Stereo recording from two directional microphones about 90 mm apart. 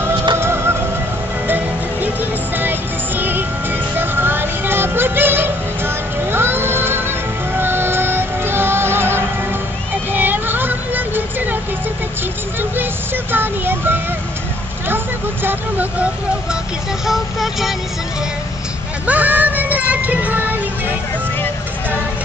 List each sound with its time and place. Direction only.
0.4 s music: 30° right (ahead or behind)
2.5 s music: 20° right (ahead or behind)
12.7 s music: 25° right (ahead or behind)
15.4 s vehicle: 20° right (ahead or behind)
17.0 s vehicle: 5° right (ahead or behind)
19.0 s music: 15° right (ahead or behind)